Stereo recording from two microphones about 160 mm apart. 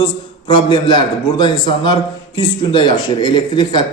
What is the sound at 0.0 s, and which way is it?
A man's voice, 30° left (ahead or behind).